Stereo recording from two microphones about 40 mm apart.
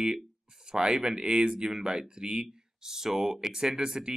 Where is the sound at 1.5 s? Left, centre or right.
Centre.